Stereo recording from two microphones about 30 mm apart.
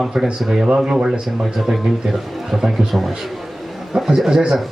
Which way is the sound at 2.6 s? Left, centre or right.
Centre.